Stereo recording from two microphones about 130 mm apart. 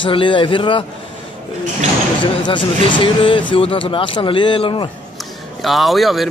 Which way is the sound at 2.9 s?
40° left (ahead or behind).